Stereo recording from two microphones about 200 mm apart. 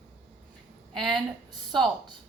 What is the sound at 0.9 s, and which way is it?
Speech, centre (ahead or behind).